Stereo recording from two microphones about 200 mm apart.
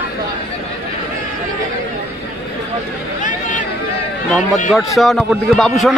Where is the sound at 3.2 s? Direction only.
40° left (ahead or behind).